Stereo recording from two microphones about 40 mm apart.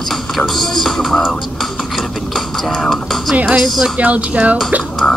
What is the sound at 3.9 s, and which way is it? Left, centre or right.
Speech, right.